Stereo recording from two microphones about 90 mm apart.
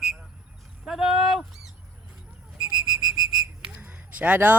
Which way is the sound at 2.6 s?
60° right (ahead or behind).